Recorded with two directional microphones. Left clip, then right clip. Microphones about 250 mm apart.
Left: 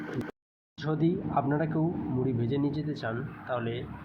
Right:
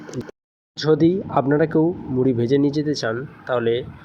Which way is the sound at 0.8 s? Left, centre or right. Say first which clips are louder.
Right 13 dB; right.